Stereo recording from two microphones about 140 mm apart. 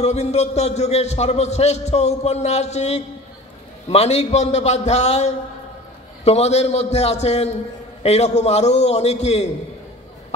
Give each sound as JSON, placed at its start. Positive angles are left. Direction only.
{"t": 0.0, "sound": "a man's voice", "side_deg": 50}